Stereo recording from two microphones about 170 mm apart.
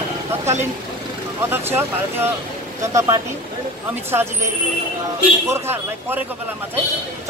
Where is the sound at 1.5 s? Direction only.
15° right (ahead or behind).